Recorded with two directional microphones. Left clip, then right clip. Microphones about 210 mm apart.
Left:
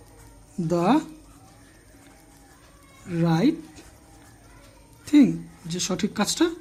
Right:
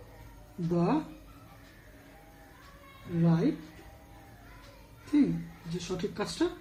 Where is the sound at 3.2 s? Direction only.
40° left (ahead or behind).